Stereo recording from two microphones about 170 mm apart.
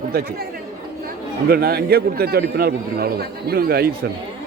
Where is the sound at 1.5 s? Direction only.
65° right (ahead or behind).